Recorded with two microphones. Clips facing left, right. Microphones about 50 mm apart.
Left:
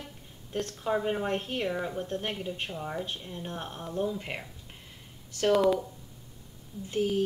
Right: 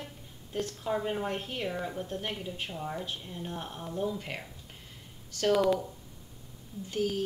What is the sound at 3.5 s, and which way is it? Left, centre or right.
Speech, left.